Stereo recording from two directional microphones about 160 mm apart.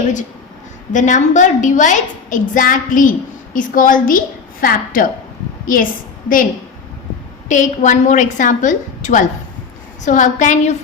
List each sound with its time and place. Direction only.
0.9 s a woman's voice: 50° left (ahead or behind)
7.4 s a woman's voice: 50° left (ahead or behind)